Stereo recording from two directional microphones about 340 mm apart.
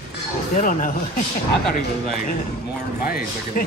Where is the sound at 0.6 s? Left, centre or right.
Left.